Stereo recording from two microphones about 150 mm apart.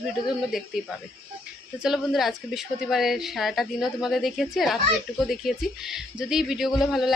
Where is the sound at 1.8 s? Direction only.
Centre (ahead or behind).